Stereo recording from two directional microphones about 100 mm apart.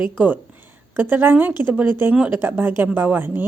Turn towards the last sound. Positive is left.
turn(degrees=-20)  # may be behind; listen again after turning